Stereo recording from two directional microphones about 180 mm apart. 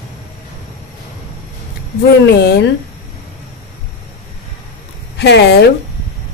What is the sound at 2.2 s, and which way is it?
Speech, 70° left (ahead or behind).